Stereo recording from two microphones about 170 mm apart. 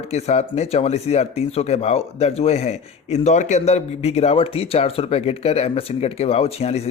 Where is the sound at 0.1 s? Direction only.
40° left (ahead or behind).